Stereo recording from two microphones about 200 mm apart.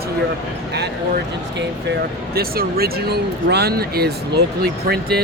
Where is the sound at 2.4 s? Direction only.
50° right (ahead or behind).